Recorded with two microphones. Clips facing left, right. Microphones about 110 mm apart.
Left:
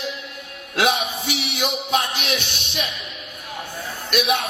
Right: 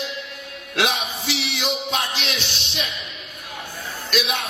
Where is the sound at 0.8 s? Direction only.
50° left (ahead or behind).